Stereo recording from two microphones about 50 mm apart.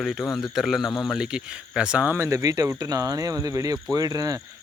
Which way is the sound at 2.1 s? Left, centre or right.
Right.